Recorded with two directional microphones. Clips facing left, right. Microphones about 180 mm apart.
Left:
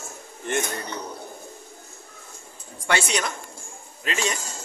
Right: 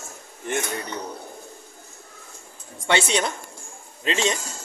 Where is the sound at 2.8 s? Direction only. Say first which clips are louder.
Right 3 dB; 25° right (ahead or behind).